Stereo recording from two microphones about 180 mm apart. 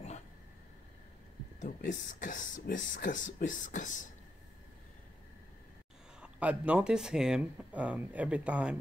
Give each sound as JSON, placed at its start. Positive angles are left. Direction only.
{"t": 1.9, "sound": "speech", "side_deg": 45}
{"t": 6.2, "sound": "speech", "side_deg": -5}